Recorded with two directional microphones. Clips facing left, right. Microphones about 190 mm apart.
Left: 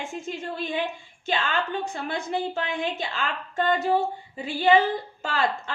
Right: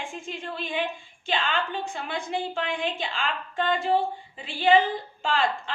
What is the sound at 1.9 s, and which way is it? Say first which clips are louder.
A woman's voice: left 1 dB; 45° left (ahead or behind).